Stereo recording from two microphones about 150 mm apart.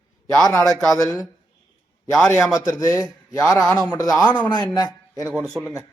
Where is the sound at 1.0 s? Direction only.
25° left (ahead or behind).